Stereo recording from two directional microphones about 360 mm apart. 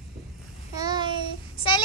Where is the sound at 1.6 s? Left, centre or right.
Centre.